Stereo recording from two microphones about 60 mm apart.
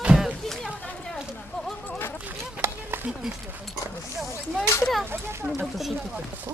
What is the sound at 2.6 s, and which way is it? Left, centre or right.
Run, right.